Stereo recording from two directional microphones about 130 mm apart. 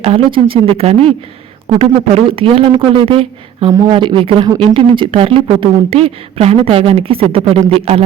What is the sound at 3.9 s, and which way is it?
Speech, 40° right (ahead or behind).